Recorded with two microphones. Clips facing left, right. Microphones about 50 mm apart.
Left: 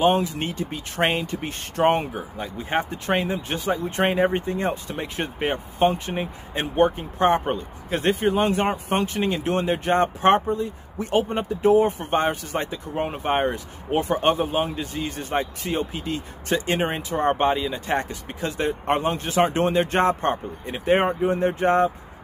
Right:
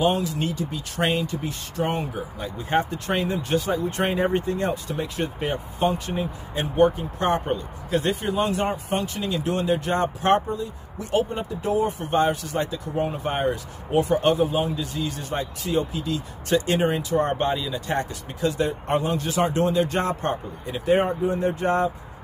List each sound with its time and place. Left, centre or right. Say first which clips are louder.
0.0 s speech: left 2 dB; left
2.1 s speech: even; centre